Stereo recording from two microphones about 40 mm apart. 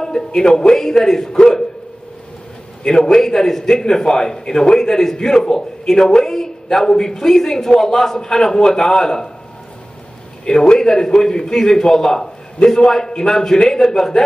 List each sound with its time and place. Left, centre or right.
0.0 s a man's voice: centre
2.8 s a man's voice: centre
10.4 s a man's voice: centre